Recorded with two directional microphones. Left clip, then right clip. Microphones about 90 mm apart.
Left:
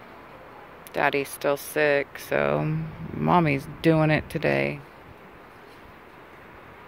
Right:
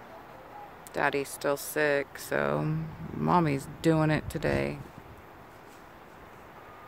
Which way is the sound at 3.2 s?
10° right (ahead or behind).